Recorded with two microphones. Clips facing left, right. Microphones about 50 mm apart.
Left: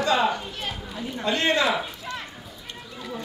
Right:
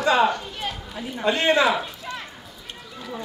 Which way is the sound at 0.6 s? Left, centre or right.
Centre.